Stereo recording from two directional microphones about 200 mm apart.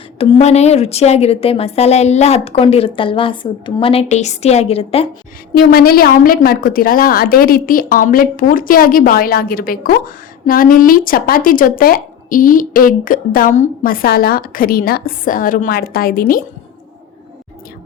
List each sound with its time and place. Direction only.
0.2 s a woman's voice: 35° left (ahead or behind)
5.5 s speech: 50° left (ahead or behind)